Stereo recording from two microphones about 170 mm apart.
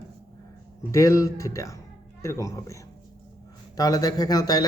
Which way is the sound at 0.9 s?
20° left (ahead or behind).